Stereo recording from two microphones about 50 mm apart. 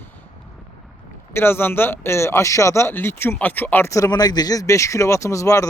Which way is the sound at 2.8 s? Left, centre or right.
Left.